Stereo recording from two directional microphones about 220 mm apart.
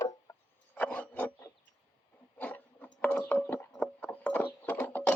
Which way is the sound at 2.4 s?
5° left (ahead or behind).